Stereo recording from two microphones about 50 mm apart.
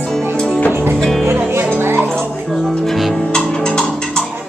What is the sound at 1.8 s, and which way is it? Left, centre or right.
Music, right.